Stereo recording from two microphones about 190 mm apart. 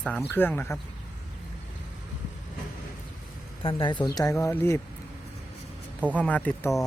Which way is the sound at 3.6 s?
25° left (ahead or behind).